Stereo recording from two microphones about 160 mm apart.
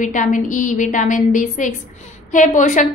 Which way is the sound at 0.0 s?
50° left (ahead or behind).